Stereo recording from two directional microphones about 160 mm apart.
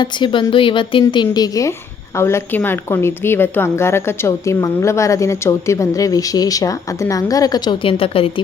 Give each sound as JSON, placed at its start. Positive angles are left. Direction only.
{"t": 0.0, "sound": "a woman's voice", "side_deg": 30}